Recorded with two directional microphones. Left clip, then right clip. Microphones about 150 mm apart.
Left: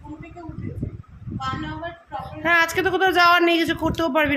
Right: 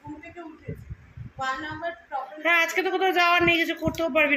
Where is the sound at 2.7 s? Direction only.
40° left (ahead or behind).